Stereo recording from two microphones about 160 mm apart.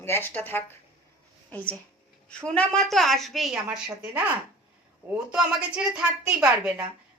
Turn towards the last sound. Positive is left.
turn(degrees=-10)  # may be behind; listen again after turning